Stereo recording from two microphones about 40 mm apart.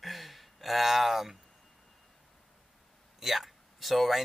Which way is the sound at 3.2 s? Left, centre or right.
Centre.